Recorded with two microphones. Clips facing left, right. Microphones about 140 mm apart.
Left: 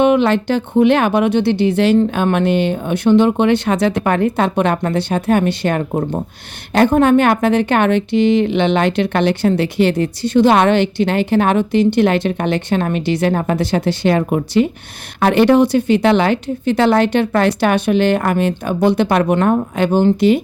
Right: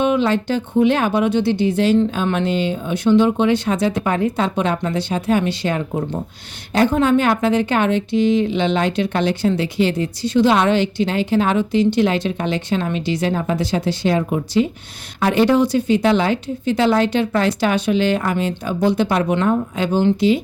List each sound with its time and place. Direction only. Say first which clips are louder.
0.0 s a woman's voice: left 4 dB; 65° left (ahead or behind)